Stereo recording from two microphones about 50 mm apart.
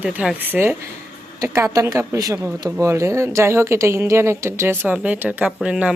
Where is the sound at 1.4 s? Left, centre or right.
Right.